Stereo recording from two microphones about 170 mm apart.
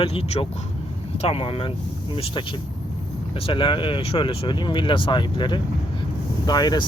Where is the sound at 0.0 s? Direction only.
35° left (ahead or behind).